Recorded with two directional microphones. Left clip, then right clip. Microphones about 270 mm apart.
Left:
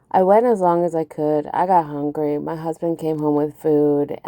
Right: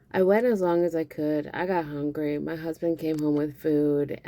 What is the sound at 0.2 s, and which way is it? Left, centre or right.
A woman's voice, left.